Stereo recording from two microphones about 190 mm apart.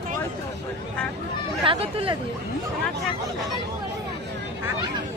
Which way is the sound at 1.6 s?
30° right (ahead or behind).